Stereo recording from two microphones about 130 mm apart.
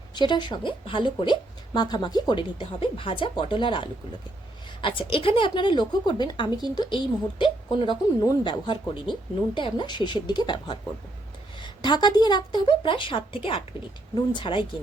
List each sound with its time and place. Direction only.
0.1 s a woman's voice: 35° left (ahead or behind)